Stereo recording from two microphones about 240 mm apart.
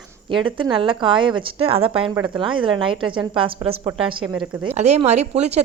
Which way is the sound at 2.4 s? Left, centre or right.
Right.